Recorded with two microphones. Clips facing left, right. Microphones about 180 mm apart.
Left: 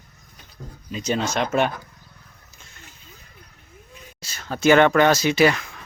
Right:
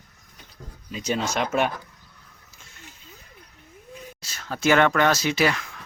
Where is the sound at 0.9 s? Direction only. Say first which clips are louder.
Left 2 dB; 5° right (ahead or behind).